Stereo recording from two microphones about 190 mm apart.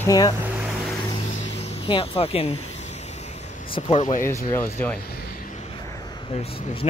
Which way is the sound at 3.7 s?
35° left (ahead or behind).